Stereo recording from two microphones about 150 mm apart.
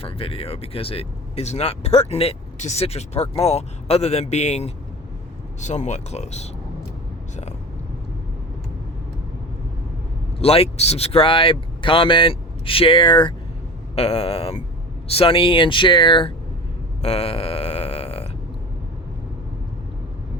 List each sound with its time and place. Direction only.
0.0 s speech: 40° left (ahead or behind)
10.4 s speech: 40° left (ahead or behind)
13.9 s speech: 45° left (ahead or behind)
17.0 s grunt: 45° left (ahead or behind)